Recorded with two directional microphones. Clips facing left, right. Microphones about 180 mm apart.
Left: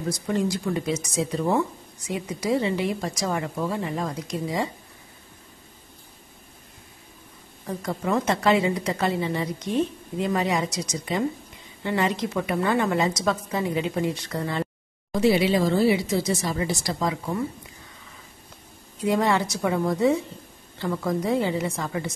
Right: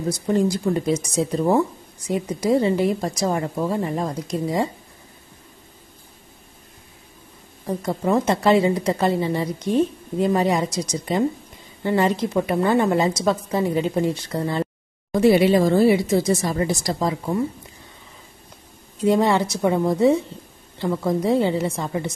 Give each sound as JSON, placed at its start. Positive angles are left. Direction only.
{"t": 0.3, "sound": "a woman's voice", "side_deg": -35}
{"t": 7.6, "sound": "a woman's voice", "side_deg": -30}
{"t": 15.1, "sound": "a woman's voice", "side_deg": -55}
{"t": 19.0, "sound": "a woman's voice", "side_deg": -25}